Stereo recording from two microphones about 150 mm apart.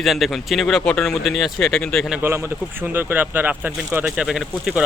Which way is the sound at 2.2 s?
15° right (ahead or behind).